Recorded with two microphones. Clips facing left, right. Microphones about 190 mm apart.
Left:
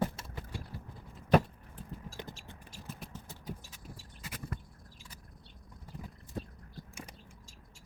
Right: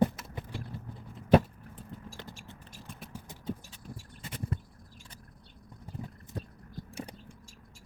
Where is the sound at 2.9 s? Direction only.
5° left (ahead or behind).